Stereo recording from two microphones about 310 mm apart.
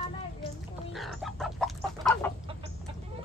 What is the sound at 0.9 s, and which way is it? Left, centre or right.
Chicken, centre.